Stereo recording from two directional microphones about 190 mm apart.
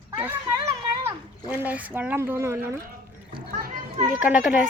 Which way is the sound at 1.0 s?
10° right (ahead or behind).